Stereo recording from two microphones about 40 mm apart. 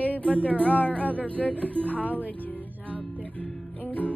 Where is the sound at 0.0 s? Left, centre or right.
Left.